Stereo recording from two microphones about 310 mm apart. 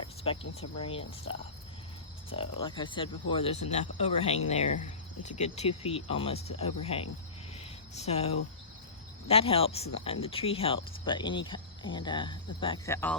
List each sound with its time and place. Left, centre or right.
0.3 s speech: centre
2.3 s speech: centre